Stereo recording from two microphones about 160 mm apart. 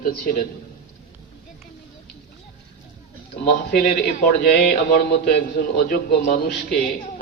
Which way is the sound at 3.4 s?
60° left (ahead or behind).